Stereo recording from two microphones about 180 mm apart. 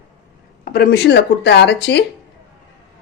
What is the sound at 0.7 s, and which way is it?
A woman's voice, 60° left (ahead or behind).